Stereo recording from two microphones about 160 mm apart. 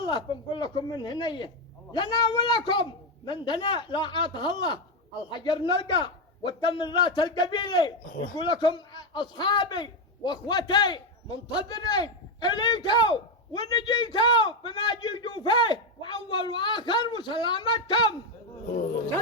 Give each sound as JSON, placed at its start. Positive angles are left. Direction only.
{"t": 0.0, "sound": "a man's voice", "side_deg": 30}
{"t": 8.1, "sound": "speech", "side_deg": 60}
{"t": 8.4, "sound": "a man's voice", "side_deg": 30}